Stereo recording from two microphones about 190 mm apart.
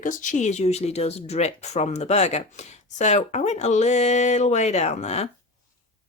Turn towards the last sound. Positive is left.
turn(degrees=35)  # may be behind; listen again after turning